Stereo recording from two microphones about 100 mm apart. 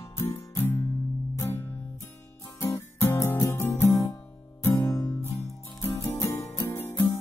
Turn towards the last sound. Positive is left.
turn(degrees=20)  # may be behind; listen again after turning